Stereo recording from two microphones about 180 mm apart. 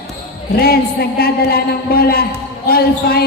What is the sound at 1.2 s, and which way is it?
Speech, 55° left (ahead or behind).